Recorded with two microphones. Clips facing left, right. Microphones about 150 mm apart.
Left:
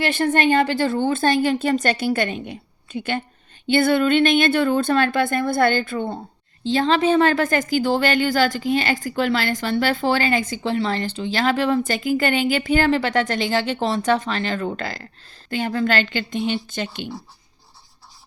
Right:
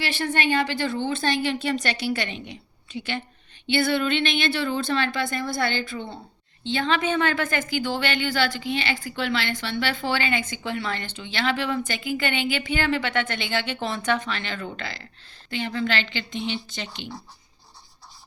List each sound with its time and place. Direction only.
0.0 s a woman's voice: 50° left (ahead or behind)
6.7 s a woman's voice: 35° left (ahead or behind); by 17.1 s 50° left (ahead or behind)